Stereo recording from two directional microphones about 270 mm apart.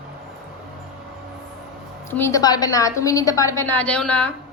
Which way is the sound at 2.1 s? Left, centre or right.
Centre.